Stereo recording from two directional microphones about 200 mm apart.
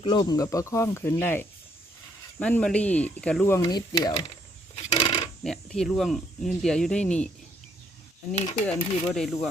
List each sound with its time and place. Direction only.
0.0 s speech: 20° left (ahead or behind)
4.7 s coin: 25° left (ahead or behind)
5.4 s speech: centre (ahead or behind)
8.6 s speech: 5° left (ahead or behind)